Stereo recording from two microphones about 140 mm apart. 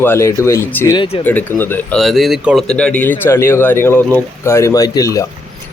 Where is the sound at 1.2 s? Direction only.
10° left (ahead or behind).